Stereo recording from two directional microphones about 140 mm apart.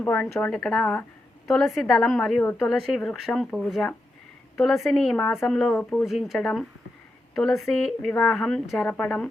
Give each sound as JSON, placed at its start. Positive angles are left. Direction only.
{"t": 0.0, "sound": "a woman's voice", "side_deg": 10}
{"t": 5.2, "sound": "a woman's voice", "side_deg": 15}
{"t": 5.5, "sound": "a woman's voice", "side_deg": 5}